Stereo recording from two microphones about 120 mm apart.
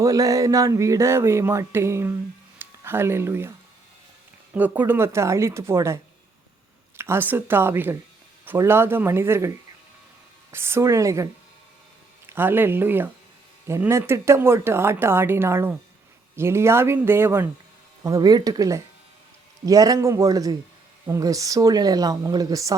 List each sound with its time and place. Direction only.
0.0 s speech: 25° right (ahead or behind)
4.5 s a woman's voice: 15° right (ahead or behind)
18.0 s speech: 30° right (ahead or behind)